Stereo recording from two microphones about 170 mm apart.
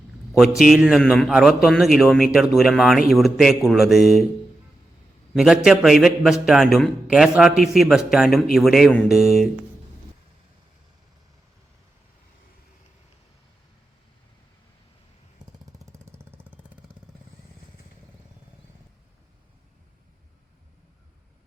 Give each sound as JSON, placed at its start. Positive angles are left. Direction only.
{"t": 0.3, "sound": "a man's voice", "side_deg": 0}
{"t": 5.3, "sound": "a man's voice", "side_deg": -5}
{"t": 15.4, "sound": "jackhammer", "side_deg": -25}
{"t": 15.9, "sound": "vehicle", "side_deg": -15}